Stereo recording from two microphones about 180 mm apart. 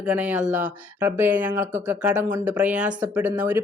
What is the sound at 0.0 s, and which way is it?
Speech, 5° right (ahead or behind).